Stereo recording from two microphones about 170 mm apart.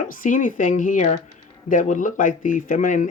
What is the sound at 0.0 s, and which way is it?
Speech, 50° left (ahead or behind).